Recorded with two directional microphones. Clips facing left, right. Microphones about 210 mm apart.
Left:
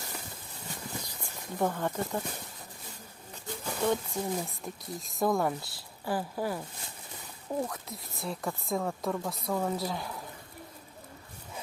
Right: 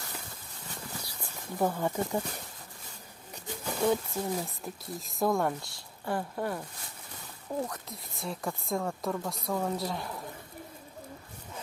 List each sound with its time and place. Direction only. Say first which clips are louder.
1.0 s speech: even; 5° right (ahead or behind)
3.4 s speech: right 2 dB; 10° right (ahead or behind)